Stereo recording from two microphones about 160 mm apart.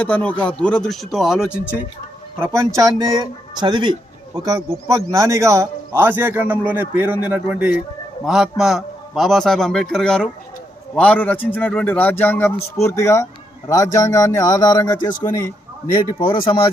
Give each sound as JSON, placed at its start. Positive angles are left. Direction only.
{"t": 0.0, "sound": "a man's voice", "side_deg": 5}
{"t": 2.4, "sound": "a man's voice", "side_deg": -20}
{"t": 16.1, "sound": "speech", "side_deg": 30}